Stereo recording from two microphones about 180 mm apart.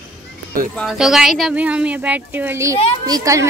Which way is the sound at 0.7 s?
Centre (ahead or behind).